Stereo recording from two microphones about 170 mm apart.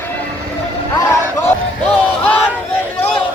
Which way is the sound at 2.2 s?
10° left (ahead or behind).